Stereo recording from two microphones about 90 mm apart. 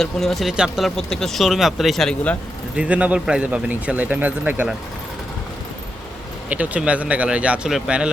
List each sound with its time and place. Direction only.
0.0 s speech: centre (ahead or behind)
0.9 s speech: 5° left (ahead or behind)
2.7 s speech: 15° right (ahead or behind)
6.5 s speech: 15° right (ahead or behind)